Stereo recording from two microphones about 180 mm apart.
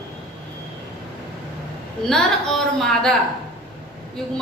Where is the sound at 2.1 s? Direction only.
Centre (ahead or behind).